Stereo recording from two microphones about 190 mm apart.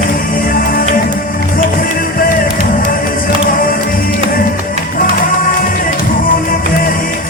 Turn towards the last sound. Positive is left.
turn(degrees=45)  # may be behind; listen again after turning